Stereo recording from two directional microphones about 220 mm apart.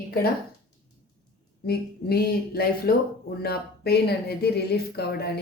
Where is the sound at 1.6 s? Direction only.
45° left (ahead or behind).